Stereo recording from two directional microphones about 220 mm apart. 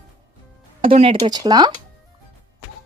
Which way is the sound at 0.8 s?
25° right (ahead or behind).